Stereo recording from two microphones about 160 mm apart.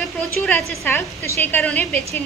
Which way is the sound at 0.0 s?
Centre (ahead or behind).